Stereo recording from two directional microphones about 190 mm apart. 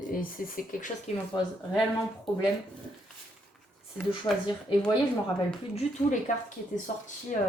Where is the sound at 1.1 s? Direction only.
35° left (ahead or behind).